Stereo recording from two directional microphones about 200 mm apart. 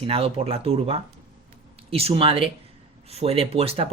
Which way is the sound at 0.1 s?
30° right (ahead or behind).